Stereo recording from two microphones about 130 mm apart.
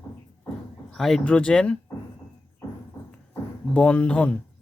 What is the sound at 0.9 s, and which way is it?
Speech, centre (ahead or behind).